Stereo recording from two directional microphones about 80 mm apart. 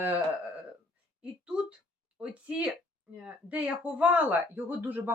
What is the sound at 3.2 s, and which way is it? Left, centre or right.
Speech, centre.